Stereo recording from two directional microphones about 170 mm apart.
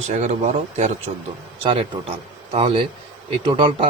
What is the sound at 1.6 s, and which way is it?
A man's voice, 30° right (ahead or behind).